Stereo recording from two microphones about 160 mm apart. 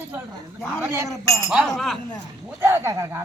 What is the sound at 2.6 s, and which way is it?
Speech, 15° right (ahead or behind).